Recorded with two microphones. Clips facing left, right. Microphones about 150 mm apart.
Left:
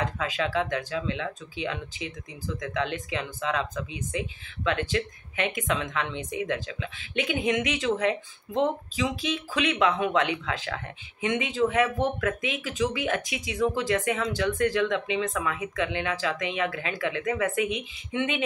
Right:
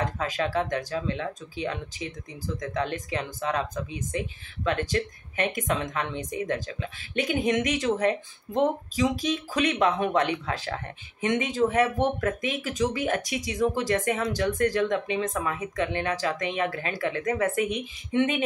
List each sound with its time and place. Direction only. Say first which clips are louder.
0.0 s speech: right 1 dB; 40° right (ahead or behind)